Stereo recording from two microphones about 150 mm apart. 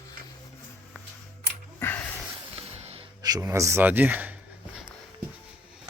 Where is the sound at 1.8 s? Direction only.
10° left (ahead or behind).